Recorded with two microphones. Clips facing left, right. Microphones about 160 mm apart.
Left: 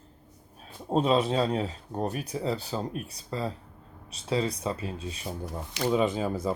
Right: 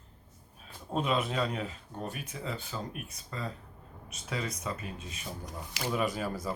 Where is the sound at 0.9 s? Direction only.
30° left (ahead or behind).